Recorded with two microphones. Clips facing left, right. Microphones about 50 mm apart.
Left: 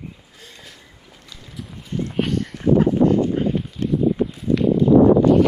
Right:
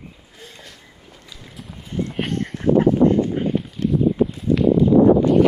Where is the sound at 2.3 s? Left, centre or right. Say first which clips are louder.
Right 1 dB; right.